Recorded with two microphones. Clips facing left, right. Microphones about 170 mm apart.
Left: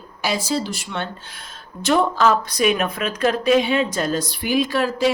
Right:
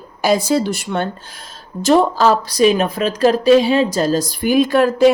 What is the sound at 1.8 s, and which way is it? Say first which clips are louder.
Speech: right 5 dB; 40° right (ahead or behind).